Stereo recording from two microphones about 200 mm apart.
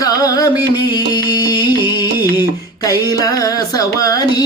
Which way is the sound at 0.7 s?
20° left (ahead or behind).